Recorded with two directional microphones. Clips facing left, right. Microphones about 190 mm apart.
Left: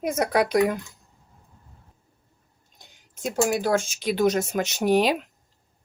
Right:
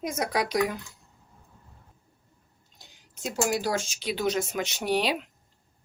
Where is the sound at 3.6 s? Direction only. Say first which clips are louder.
Left 6 dB; 50° left (ahead or behind).